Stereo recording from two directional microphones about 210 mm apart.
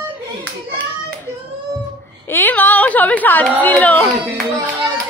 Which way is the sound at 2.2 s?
10° left (ahead or behind).